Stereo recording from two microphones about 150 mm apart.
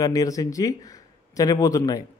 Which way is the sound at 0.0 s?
25° left (ahead or behind).